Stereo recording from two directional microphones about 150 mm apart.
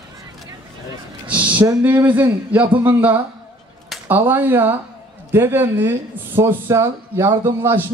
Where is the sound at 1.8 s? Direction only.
10° right (ahead or behind).